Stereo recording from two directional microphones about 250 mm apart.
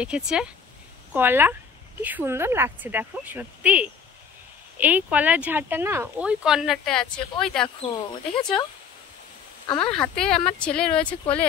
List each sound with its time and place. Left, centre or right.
0.0 s speech: centre
7.6 s speech: centre
9.8 s speech: centre